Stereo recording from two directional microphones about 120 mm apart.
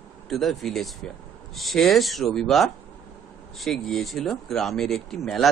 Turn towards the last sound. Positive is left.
turn(degrees=5)  # may be behind; listen again after turning